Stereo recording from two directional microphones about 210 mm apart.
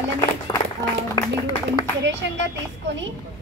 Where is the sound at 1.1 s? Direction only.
20° left (ahead or behind).